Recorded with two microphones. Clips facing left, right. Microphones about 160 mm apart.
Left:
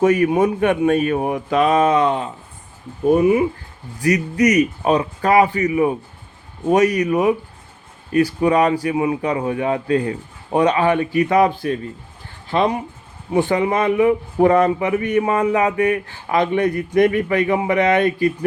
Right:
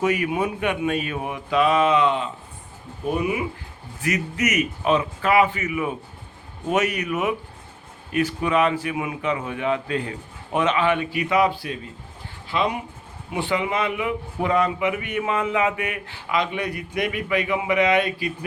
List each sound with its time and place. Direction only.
0.0 s a man's voice: 45° left (ahead or behind)